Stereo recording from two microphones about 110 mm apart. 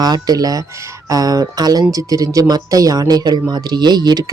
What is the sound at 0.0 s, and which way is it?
Speech, 35° right (ahead or behind).